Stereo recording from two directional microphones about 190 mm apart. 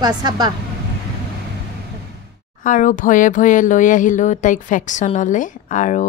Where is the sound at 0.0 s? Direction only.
20° right (ahead or behind).